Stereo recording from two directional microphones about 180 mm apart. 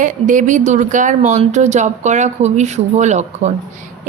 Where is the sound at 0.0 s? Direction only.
45° right (ahead or behind).